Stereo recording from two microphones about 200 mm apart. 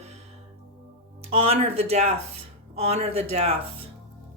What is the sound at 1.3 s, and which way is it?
Speech, 30° right (ahead or behind).